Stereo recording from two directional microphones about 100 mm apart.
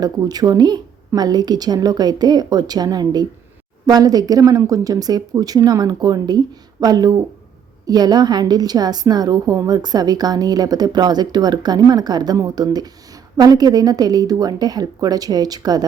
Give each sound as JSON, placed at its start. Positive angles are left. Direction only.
{"t": 0.0, "sound": "a woman's voice", "side_deg": -40}